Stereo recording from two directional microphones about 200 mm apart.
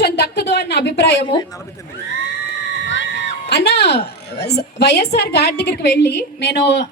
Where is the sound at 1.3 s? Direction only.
20° left (ahead or behind).